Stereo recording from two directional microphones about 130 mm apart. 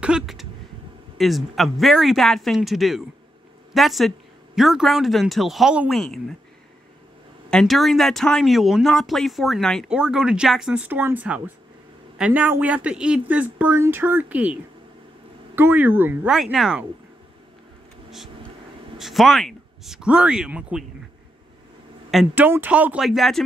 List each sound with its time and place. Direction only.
0.0 s a sound: 5° right (ahead or behind)
1.1 s speech: centre (ahead or behind)
7.4 s speech: 5° left (ahead or behind); by 16.3 s 15° right (ahead or behind)
16.3 s speech: 5° right (ahead or behind)
18.9 s speech: centre (ahead or behind)
22.3 s speech: 15° right (ahead or behind)
23.0 s speech: centre (ahead or behind)